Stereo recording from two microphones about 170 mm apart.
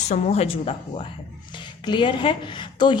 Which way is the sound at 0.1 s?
40° left (ahead or behind).